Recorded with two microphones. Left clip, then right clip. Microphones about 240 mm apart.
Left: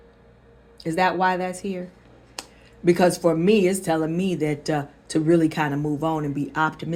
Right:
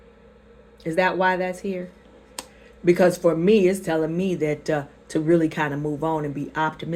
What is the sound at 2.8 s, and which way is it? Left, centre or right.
Speech, left.